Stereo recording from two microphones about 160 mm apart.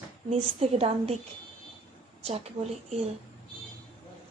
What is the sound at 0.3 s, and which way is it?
Speech, 40° right (ahead or behind).